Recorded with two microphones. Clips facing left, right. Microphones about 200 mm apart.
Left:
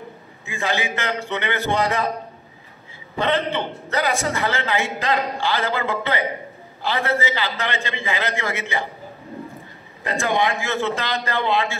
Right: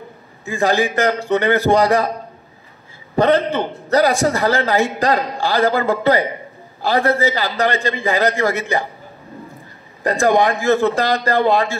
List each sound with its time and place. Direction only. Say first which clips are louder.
0.5 s a man's voice: right 8 dB; 35° right (ahead or behind)
3.2 s a man's voice: right 7 dB; 40° right (ahead or behind)
10.0 s a man's voice: right 7 dB; 40° right (ahead or behind)